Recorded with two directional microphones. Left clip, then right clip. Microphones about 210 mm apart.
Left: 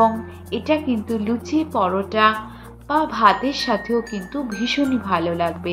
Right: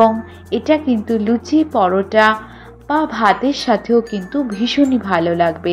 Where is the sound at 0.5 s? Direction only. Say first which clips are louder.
Right 5 dB; 25° right (ahead or behind).